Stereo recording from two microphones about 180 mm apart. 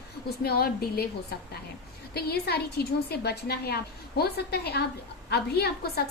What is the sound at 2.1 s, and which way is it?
A woman's voice, 65° left (ahead or behind).